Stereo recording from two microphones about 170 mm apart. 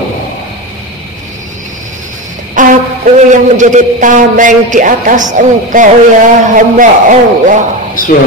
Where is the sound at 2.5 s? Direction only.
50° right (ahead or behind).